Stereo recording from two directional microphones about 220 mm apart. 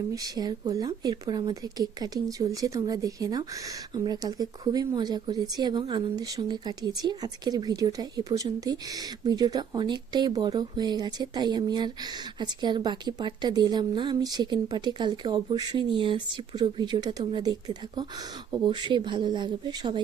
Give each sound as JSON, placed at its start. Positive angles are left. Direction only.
{"t": 0.1, "sound": "speech", "side_deg": -15}
{"t": 18.6, "sound": "speech", "side_deg": -20}